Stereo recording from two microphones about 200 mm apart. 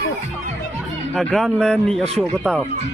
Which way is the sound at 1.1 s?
Centre (ahead or behind).